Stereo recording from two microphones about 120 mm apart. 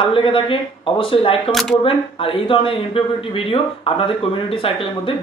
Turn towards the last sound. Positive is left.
turn(degrees=50)  # may be behind; listen again after turning